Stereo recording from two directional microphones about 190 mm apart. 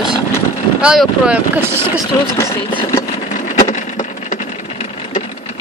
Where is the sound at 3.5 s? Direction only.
40° left (ahead or behind).